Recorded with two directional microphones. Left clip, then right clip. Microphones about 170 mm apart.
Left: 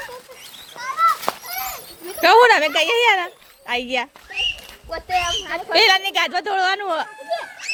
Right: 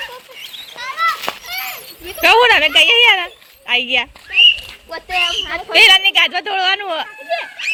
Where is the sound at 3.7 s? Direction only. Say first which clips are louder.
Right 7 dB; 10° left (ahead or behind).